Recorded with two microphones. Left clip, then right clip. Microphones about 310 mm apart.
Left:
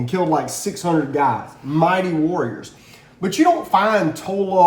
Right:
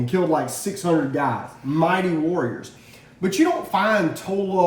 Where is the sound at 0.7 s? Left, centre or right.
Centre.